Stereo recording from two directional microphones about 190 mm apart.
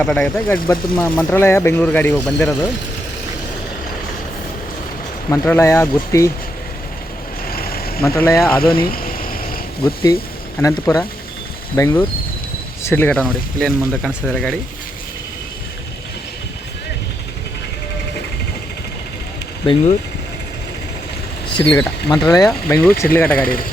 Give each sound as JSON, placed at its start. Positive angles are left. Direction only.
{"t": 0.0, "sound": "speech", "side_deg": 5}
{"t": 5.3, "sound": "speech", "side_deg": 15}
{"t": 7.5, "sound": "vehicle", "side_deg": 50}
{"t": 8.0, "sound": "speech", "side_deg": 15}
{"t": 8.7, "sound": "vehicle", "side_deg": 50}
{"t": 9.8, "sound": "speech", "side_deg": 20}
{"t": 21.5, "sound": "speech", "side_deg": 25}
{"t": 23.4, "sound": "speech", "side_deg": 50}